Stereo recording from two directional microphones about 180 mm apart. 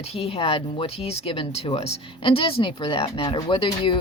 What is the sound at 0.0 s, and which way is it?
Speech, 35° left (ahead or behind).